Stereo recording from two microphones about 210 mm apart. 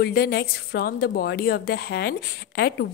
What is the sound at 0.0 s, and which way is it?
A woman's voice, 45° left (ahead or behind).